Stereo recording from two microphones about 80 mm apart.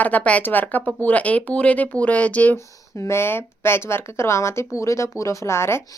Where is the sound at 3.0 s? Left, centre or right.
Left.